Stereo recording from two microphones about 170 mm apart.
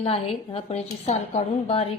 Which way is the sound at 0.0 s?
35° left (ahead or behind).